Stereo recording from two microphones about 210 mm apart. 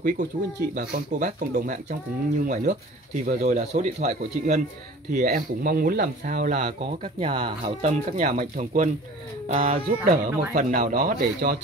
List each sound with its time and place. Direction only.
0.2 s speech: 40° right (ahead or behind)
5.1 s speech: 45° right (ahead or behind)